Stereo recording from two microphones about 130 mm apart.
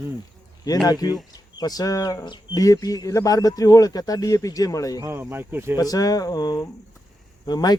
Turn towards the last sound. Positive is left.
turn(degrees=30)  # may be behind; listen again after turning